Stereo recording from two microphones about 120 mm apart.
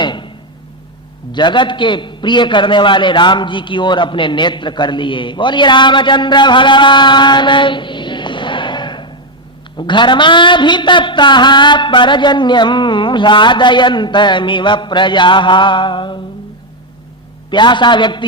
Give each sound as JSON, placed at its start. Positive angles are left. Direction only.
{"t": 0.0, "sound": "a sound", "side_deg": 40}
{"t": 1.3, "sound": "a man's voice", "side_deg": 40}
{"t": 17.5, "sound": "a man's voice", "side_deg": 40}